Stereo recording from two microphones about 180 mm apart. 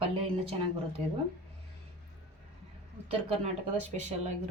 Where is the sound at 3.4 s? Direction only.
40° right (ahead or behind).